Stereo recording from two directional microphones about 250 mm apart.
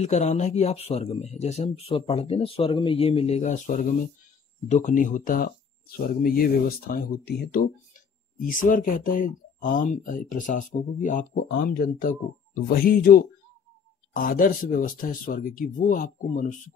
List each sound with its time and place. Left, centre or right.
0.0 s speech: left